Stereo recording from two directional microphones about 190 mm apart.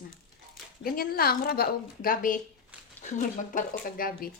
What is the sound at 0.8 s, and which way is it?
A woman's voice, 50° left (ahead or behind).